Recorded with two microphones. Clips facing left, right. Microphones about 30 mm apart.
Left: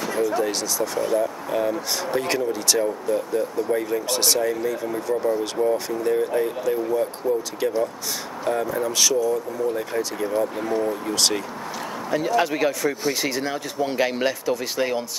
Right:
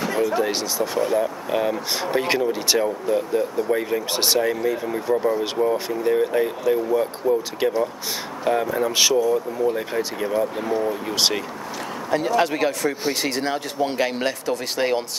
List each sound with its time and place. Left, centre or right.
0.0 s speech: centre
10.9 s speech: centre
12.3 s speech: centre
13.4 s speech: right
13.9 s speech: centre
14.8 s speech: right